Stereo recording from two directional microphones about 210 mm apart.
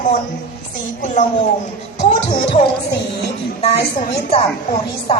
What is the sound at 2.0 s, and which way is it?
Speech, 30° left (ahead or behind).